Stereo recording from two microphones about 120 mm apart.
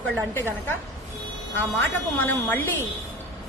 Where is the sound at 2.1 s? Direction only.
15° left (ahead or behind).